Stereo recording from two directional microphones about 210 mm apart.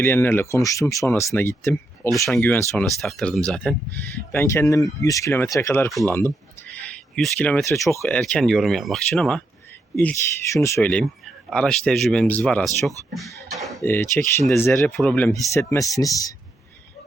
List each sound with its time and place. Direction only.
0.0 s speech: 10° left (ahead or behind)
5.9 s speech: centre (ahead or behind); by 16.3 s 15° left (ahead or behind)